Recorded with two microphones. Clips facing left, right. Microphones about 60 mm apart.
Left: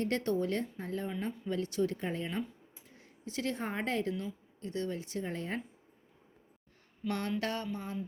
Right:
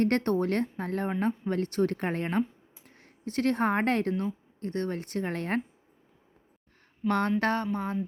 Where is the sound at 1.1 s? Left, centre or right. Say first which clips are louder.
Right 7 dB; right.